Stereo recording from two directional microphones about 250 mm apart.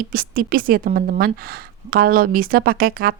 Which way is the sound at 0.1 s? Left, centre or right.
Right.